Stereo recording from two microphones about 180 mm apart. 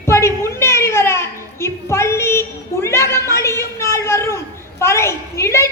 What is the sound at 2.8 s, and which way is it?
A man's voice, 15° left (ahead or behind).